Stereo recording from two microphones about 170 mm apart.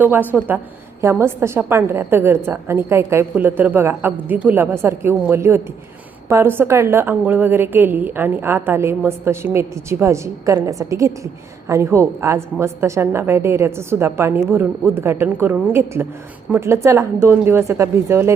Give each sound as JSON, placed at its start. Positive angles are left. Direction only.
{"t": 0.0, "sound": "a woman's voice", "side_deg": -10}